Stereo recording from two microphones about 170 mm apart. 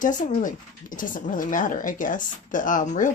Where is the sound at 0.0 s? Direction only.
50° left (ahead or behind).